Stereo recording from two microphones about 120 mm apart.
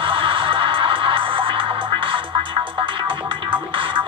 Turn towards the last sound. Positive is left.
turn(degrees=-45)  # may be behind; listen again after turning